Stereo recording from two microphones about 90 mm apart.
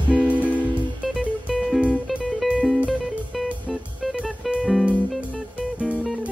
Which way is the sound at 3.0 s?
Centre (ahead or behind).